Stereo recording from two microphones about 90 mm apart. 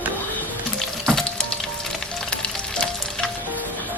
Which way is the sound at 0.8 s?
5° left (ahead or behind).